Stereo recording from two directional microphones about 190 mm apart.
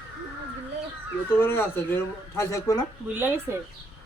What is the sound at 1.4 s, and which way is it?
Speech, 10° left (ahead or behind).